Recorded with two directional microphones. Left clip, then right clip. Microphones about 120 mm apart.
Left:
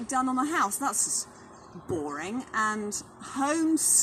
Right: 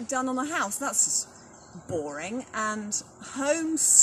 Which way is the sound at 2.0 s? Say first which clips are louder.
Even; 30° right (ahead or behind).